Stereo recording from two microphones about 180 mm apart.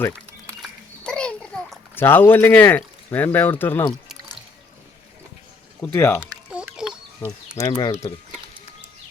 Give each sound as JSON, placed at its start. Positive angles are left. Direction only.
{"t": 0.6, "sound": "babbling", "side_deg": 5}
{"t": 5.8, "sound": "speech", "side_deg": 15}
{"t": 6.5, "sound": "a sound", "side_deg": -5}
{"t": 7.5, "sound": "speech", "side_deg": 20}